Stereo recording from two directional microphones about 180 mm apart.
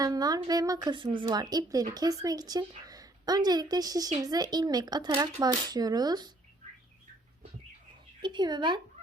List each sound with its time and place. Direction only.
0.0 s a woman's voice: 20° right (ahead or behind)
8.2 s a woman's voice: 25° right (ahead or behind)